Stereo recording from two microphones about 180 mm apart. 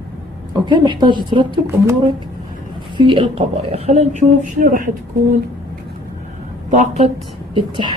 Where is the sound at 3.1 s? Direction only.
30° right (ahead or behind).